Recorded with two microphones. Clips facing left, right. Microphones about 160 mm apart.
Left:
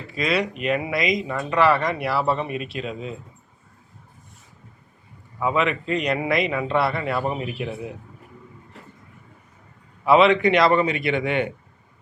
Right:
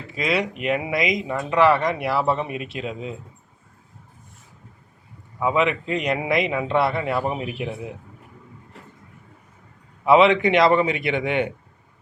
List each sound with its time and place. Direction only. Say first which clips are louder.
0.1 s speech: even; 20° right (ahead or behind)
5.4 s a man's voice: right 1 dB; 15° right (ahead or behind)
10.1 s speech: right 1 dB; 20° right (ahead or behind)